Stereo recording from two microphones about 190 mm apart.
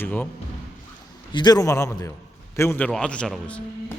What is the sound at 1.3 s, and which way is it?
A man's voice, 20° left (ahead or behind).